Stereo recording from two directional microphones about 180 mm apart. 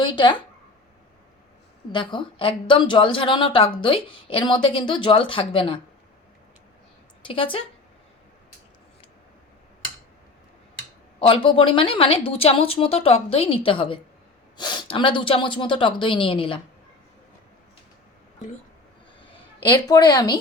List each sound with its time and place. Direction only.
0.0 s speech: 25° left (ahead or behind)
1.9 s a woman's voice: 25° left (ahead or behind)
7.2 s a woman's voice: 30° left (ahead or behind)
11.2 s a woman's voice: 30° left (ahead or behind)
19.9 s a woman's voice: 20° left (ahead or behind)